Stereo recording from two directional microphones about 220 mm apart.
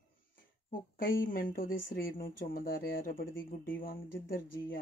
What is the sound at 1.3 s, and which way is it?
Speech, 40° left (ahead or behind).